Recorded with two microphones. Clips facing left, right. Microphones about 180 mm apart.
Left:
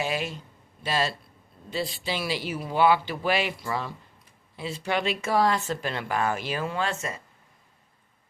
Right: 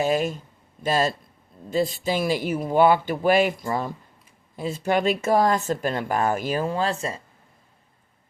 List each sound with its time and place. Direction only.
0.0 s speech: 45° right (ahead or behind)